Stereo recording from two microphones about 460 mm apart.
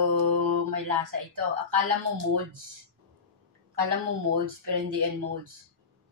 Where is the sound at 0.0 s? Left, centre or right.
Right.